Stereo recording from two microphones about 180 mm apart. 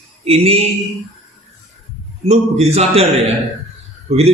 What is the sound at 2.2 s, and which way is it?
Speech, 35° right (ahead or behind).